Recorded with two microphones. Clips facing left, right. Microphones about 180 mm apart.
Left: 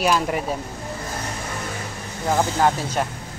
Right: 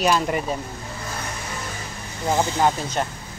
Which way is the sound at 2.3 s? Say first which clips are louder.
Left 1 dB; centre (ahead or behind).